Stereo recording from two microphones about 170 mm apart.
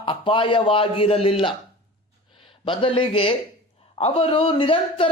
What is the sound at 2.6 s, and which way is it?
A woman's voice, 30° left (ahead or behind).